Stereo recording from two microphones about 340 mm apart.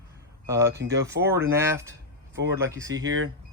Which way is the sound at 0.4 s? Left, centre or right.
Centre.